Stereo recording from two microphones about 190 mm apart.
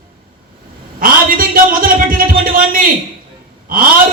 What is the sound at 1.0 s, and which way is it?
A man's voice, 50° right (ahead or behind).